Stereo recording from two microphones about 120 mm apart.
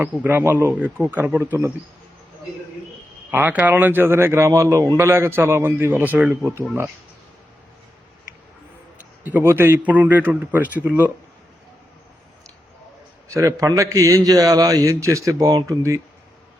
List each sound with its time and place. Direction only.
0.0 s a man's voice: 15° right (ahead or behind)
1.1 s a man's voice: 15° right (ahead or behind)
3.3 s speech: 15° right (ahead or behind)
9.2 s a man's voice: 15° right (ahead or behind)
13.2 s speech: 25° right (ahead or behind)